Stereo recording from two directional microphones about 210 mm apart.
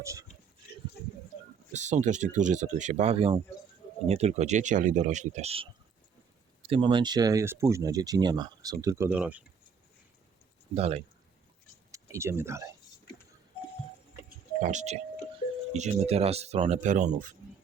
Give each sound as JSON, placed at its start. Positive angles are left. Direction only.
{"t": 0.0, "sound": "speech", "side_deg": -15}
{"t": 1.7, "sound": "speech", "side_deg": -35}
{"t": 10.8, "sound": "speech", "side_deg": -30}
{"t": 11.9, "sound": "speech", "side_deg": -15}
{"t": 14.3, "sound": "a sound", "side_deg": -35}
{"t": 15.7, "sound": "speech", "side_deg": -30}